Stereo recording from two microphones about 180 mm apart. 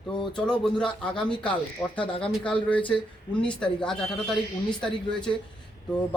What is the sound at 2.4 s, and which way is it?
A man's voice, 5° left (ahead or behind).